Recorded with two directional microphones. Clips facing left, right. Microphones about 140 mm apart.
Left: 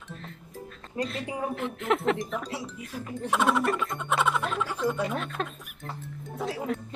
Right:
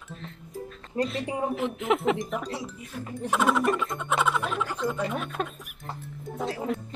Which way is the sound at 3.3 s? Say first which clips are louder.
Right 1 dB; centre (ahead or behind).